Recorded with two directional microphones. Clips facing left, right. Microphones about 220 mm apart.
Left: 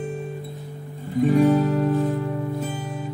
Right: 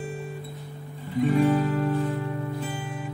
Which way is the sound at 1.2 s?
45° left (ahead or behind).